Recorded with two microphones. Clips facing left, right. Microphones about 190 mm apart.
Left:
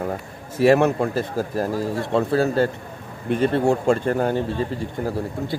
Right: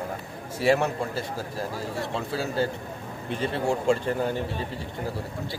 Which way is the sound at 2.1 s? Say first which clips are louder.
Left 11 dB; 55° left (ahead or behind).